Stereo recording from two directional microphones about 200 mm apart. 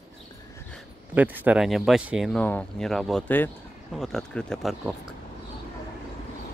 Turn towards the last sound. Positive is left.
turn(degrees=0)  # may be behind; listen again after turning